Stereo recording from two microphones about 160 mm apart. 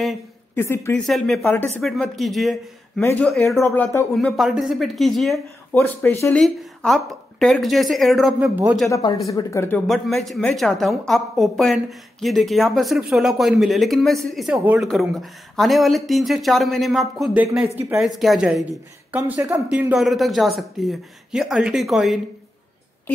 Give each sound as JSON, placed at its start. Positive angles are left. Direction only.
{"t": 0.6, "sound": "speech", "side_deg": 15}
{"t": 1.0, "sound": "a woman's voice", "side_deg": 0}
{"t": 3.4, "sound": "speech", "side_deg": 15}
{"t": 4.1, "sound": "a woman's voice", "side_deg": 0}
{"t": 5.7, "sound": "a woman's voice", "side_deg": 10}
{"t": 8.8, "sound": "speech", "side_deg": 20}
{"t": 9.8, "sound": "a woman's voice", "side_deg": 0}
{"t": 17.7, "sound": "speech", "side_deg": -15}
{"t": 18.0, "sound": "a woman's voice", "side_deg": 0}